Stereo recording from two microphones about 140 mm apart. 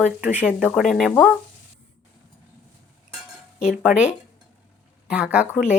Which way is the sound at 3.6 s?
10° right (ahead or behind).